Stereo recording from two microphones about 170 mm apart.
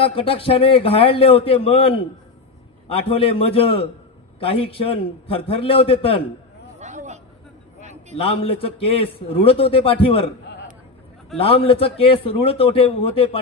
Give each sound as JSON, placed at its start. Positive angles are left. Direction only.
{"t": 0.0, "sound": "a man's voice", "side_deg": 35}
{"t": 6.8, "sound": "hubbub", "side_deg": -45}
{"t": 7.8, "sound": "a sound", "side_deg": -40}
{"t": 8.2, "sound": "a man's voice", "side_deg": 35}
{"t": 11.3, "sound": "a man's voice", "side_deg": 35}